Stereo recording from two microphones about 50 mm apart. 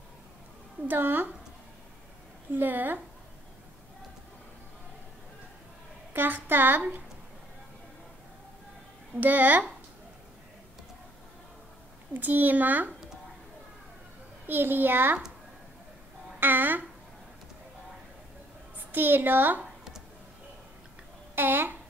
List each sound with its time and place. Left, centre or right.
0.8 s a child's voice: right
2.5 s a child's voice: right
6.1 s a child's voice: right
9.2 s a child's voice: right
12.1 s a child's voice: right
14.4 s a child's voice: right
16.3 s speech: right
18.9 s a child's voice: right
21.4 s a child's voice: right